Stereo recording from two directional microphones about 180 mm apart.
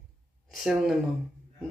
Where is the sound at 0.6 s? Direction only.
Centre (ahead or behind).